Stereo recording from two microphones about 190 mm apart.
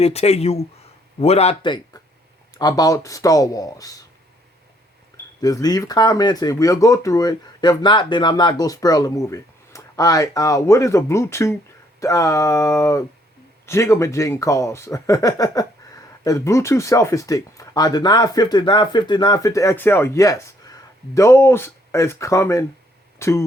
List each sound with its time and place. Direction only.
0.0 s speech: 35° left (ahead or behind); by 4.0 s 20° left (ahead or behind)
5.4 s speech: 20° left (ahead or behind)